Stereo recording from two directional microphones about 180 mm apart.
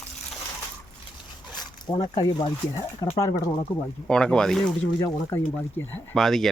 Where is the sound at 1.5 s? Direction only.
25° left (ahead or behind).